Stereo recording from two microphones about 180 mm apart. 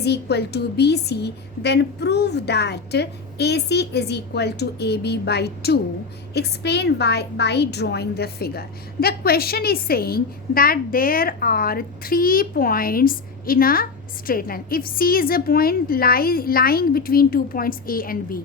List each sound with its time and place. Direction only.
0.0 s a woman's voice: 65° left (ahead or behind)